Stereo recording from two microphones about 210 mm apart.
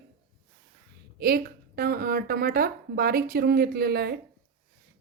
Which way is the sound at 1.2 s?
45° right (ahead or behind).